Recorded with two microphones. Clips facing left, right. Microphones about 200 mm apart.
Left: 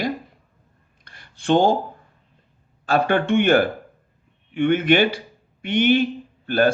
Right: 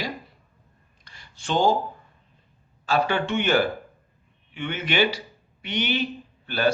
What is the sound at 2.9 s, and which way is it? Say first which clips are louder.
Speech: left 5 dB; 55° left (ahead or behind).